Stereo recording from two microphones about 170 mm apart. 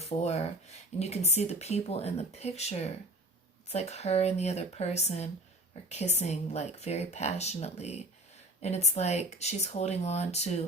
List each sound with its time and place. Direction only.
0.1 s speech: 40° left (ahead or behind)